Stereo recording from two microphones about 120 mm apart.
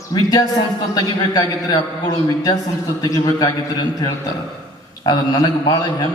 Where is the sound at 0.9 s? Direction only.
35° left (ahead or behind).